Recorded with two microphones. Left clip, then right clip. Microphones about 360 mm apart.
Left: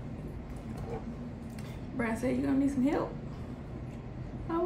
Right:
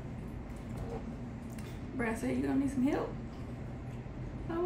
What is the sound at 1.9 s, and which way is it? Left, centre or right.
A woman's voice, centre.